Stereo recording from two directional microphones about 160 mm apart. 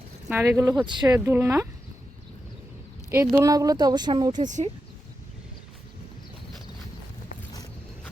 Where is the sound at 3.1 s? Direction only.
20° right (ahead or behind).